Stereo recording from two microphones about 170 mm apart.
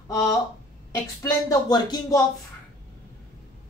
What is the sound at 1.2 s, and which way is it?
Speech, 20° left (ahead or behind).